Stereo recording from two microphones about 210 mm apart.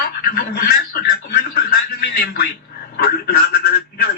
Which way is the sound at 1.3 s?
45° left (ahead or behind).